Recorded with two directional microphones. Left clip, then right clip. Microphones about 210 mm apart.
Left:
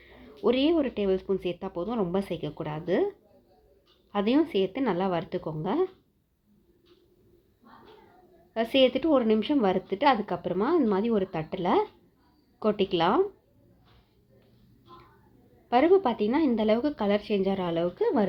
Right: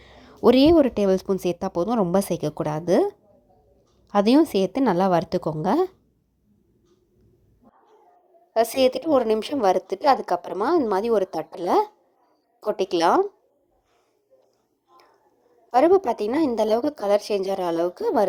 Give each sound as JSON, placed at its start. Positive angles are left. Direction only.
{"t": 0.0, "sound": "a woman's voice", "side_deg": -45}
{"t": 8.5, "sound": "a woman's voice", "side_deg": -40}
{"t": 15.7, "sound": "a woman's voice", "side_deg": -40}